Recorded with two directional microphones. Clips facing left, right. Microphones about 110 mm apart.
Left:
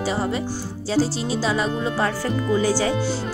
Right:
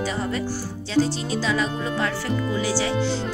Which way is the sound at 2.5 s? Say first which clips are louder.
Left 6 dB; 50° left (ahead or behind).